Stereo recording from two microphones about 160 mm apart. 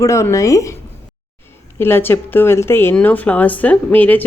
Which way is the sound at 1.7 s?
15° left (ahead or behind).